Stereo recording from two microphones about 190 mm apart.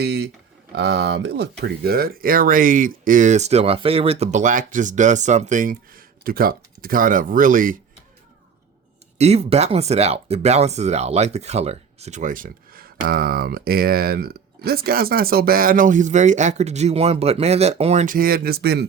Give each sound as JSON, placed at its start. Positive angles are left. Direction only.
{"t": 0.0, "sound": "speech", "side_deg": -60}
{"t": 9.1, "sound": "speech", "side_deg": -35}